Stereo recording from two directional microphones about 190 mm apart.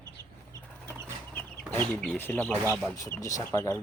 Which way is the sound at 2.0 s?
10° left (ahead or behind).